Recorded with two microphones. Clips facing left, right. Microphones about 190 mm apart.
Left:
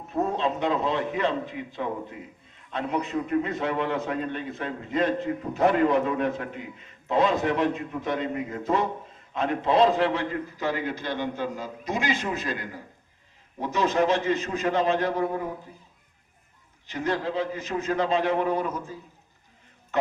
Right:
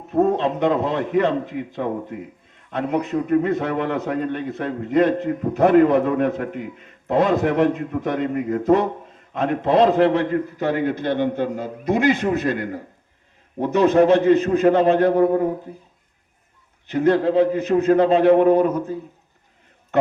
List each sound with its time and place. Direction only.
0.1 s a man's voice: 55° right (ahead or behind)
16.8 s a man's voice: 60° right (ahead or behind)